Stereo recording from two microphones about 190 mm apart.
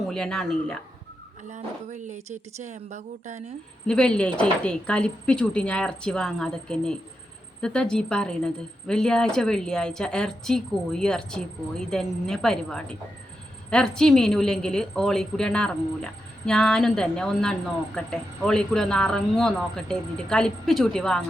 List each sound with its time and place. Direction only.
0.1 s a woman's voice: 5° left (ahead or behind)
1.5 s speech: 40° right (ahead or behind)
3.8 s a woman's voice: 5° left (ahead or behind)